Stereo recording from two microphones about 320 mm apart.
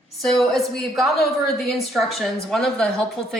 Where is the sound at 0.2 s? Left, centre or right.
Centre.